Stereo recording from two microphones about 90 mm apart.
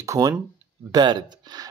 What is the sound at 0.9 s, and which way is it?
Speech, 55° right (ahead or behind).